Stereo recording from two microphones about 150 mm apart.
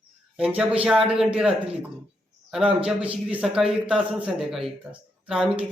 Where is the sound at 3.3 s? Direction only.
5° right (ahead or behind).